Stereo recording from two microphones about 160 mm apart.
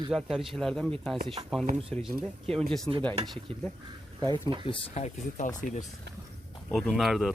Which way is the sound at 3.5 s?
35° right (ahead or behind).